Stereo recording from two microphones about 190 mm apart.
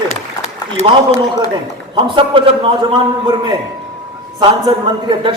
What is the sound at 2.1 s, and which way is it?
Speech, 30° right (ahead or behind).